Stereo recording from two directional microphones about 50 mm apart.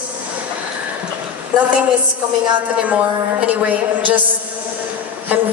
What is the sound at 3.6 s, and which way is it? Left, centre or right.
Speech, right.